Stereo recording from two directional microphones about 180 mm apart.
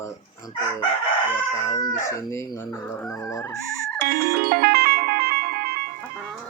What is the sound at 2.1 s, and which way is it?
Speech, 15° left (ahead or behind).